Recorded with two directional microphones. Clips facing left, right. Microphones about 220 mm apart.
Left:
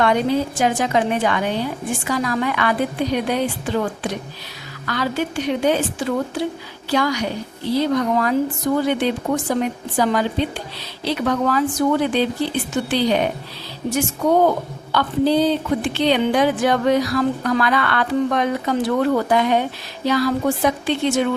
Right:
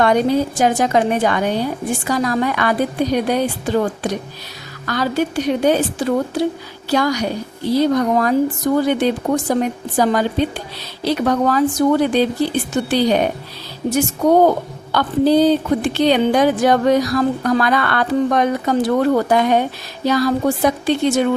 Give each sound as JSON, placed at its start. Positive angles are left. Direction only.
{"t": 0.0, "sound": "speech", "side_deg": -40}